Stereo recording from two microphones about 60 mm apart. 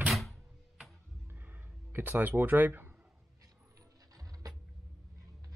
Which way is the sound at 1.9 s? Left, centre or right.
Right.